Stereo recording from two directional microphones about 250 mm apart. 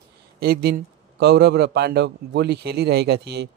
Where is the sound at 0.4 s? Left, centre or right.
Right.